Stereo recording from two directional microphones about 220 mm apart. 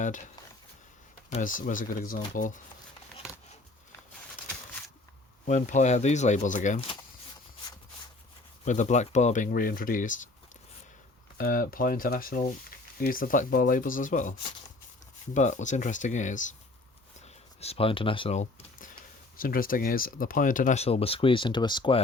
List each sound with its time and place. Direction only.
0.0 s speech: 35° left (ahead or behind)
1.3 s speech: 35° left (ahead or behind)
5.5 s speech: 35° left (ahead or behind)
8.6 s speech: 35° left (ahead or behind)
11.3 s speech: 40° left (ahead or behind)
17.2 s a sound: 30° left (ahead or behind)
19.4 s speech: 40° left (ahead or behind); by 22.0 s 20° left (ahead or behind)